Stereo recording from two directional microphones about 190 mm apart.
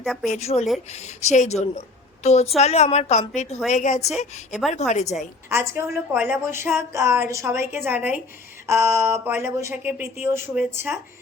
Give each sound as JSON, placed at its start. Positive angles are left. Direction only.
{"t": 0.0, "sound": "a woman's voice", "side_deg": 0}
{"t": 0.3, "sound": "a woman's voice", "side_deg": 35}
{"t": 5.5, "sound": "a woman's voice", "side_deg": -15}